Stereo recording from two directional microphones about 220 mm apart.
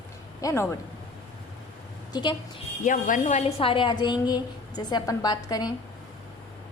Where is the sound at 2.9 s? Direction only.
35° left (ahead or behind); by 5.7 s 15° left (ahead or behind).